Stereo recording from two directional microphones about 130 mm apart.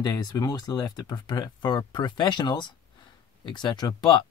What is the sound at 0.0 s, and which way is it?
Speech, 30° left (ahead or behind).